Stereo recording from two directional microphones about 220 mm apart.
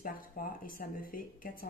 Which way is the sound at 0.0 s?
40° left (ahead or behind).